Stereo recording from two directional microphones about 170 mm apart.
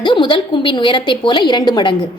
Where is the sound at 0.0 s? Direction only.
30° left (ahead or behind).